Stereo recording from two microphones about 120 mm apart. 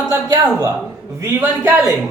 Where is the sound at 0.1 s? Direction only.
30° right (ahead or behind).